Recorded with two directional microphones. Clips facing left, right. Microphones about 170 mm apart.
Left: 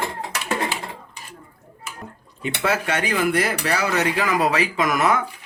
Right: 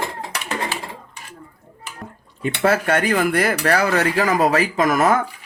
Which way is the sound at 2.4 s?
50° right (ahead or behind).